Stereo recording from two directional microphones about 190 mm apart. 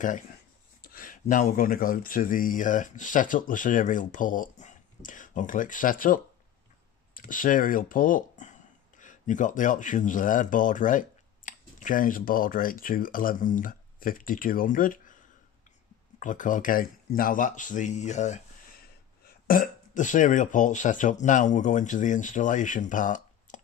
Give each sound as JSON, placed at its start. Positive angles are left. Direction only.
{"t": 0.8, "sound": "a sound", "side_deg": 45}
{"t": 1.2, "sound": "speech", "side_deg": 40}
{"t": 16.2, "sound": "speech", "side_deg": 45}